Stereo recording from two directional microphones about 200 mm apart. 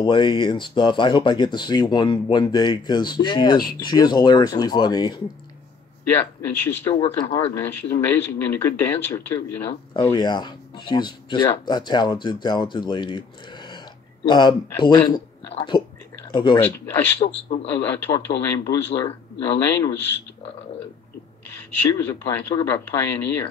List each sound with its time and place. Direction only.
0.0 s speech: 20° left (ahead or behind)
16.2 s a sound: 20° left (ahead or behind)
16.6 s speech: 10° left (ahead or behind)
21.8 s speech: 15° left (ahead or behind)